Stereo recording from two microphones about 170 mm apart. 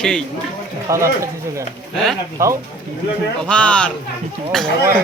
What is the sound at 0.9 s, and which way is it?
Speech, 15° right (ahead or behind).